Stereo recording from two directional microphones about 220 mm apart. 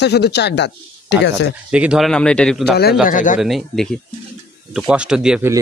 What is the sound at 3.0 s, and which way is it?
Speech, 35° left (ahead or behind).